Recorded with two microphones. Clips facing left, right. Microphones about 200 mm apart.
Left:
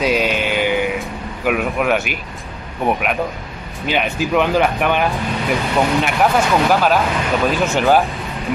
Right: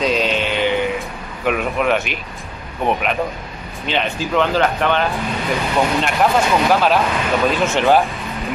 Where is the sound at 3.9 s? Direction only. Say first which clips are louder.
Left 2 dB; 10° left (ahead or behind).